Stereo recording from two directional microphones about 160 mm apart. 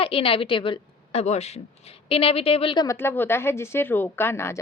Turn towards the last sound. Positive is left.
turn(degrees=15)  # may be behind; listen again after turning